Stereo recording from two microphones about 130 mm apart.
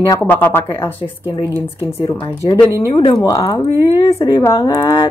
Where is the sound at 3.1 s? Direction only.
30° left (ahead or behind).